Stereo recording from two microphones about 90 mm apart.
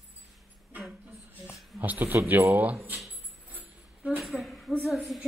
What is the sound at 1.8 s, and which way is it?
Speech, 20° right (ahead or behind).